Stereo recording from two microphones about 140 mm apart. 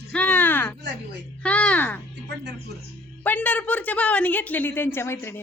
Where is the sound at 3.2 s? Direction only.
10° left (ahead or behind).